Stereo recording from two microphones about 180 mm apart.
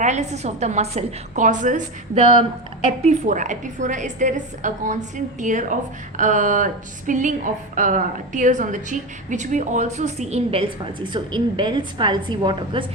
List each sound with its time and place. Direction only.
0.0 s a woman's voice: 40° right (ahead or behind); by 12.8 s 25° right (ahead or behind)